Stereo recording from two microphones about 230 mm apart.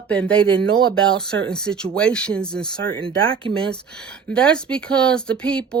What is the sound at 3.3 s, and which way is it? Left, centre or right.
Speech, right.